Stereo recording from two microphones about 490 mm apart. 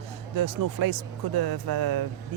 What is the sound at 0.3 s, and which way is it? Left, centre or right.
Speech, right.